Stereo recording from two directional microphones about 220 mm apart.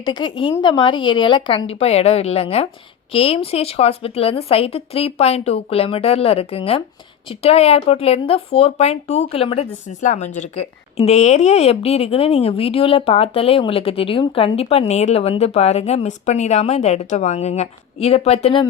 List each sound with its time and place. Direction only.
0.0 s speech: 20° left (ahead or behind)